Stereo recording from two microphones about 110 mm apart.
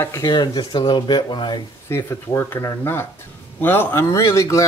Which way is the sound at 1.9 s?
25° left (ahead or behind).